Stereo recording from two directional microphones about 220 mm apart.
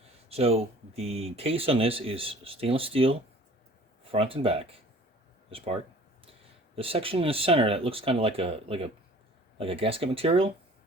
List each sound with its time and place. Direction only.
0.3 s speech: 25° right (ahead or behind)
6.7 s speech: 25° right (ahead or behind)